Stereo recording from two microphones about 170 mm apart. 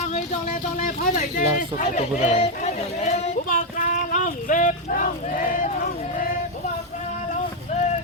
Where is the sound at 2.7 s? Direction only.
40° left (ahead or behind).